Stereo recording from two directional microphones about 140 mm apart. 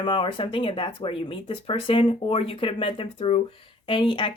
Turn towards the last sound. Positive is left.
turn(degrees=35)  # may be behind; listen again after turning